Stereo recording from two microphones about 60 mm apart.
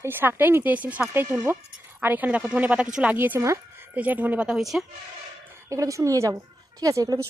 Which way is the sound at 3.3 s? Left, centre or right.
Right.